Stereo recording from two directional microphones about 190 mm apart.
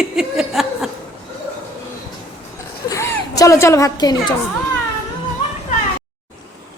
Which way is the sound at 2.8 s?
15° left (ahead or behind).